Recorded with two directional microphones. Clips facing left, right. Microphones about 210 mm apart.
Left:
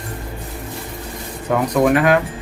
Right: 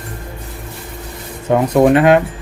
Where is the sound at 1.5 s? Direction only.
25° right (ahead or behind).